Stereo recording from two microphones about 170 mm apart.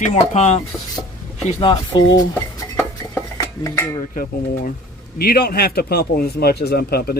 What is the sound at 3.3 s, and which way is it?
Dishes, 20° left (ahead or behind).